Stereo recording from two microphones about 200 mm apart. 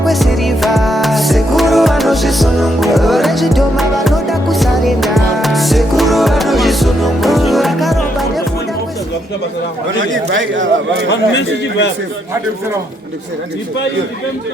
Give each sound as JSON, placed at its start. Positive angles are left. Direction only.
{"t": 0.0, "sound": "music", "side_deg": 0}
{"t": 10.0, "sound": "speech", "side_deg": -70}
{"t": 11.1, "sound": "a man's voice", "side_deg": 60}